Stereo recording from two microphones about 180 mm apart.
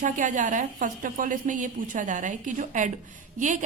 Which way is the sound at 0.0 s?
45° right (ahead or behind).